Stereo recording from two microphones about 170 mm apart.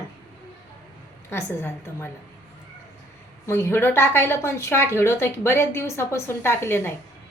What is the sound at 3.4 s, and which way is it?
A woman's voice, 15° left (ahead or behind).